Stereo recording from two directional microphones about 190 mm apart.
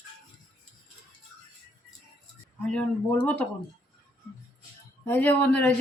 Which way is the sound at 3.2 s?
5° left (ahead or behind).